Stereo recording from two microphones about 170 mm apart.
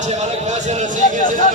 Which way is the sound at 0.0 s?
40° right (ahead or behind).